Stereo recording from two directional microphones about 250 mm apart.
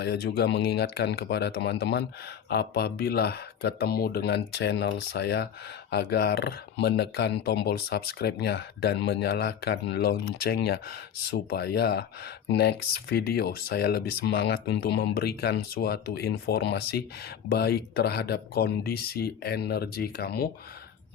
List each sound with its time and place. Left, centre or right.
0.0 s speech: left